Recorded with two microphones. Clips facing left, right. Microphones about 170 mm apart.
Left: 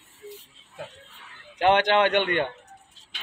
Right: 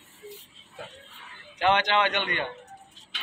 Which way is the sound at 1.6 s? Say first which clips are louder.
Left 4 dB; 55° left (ahead or behind).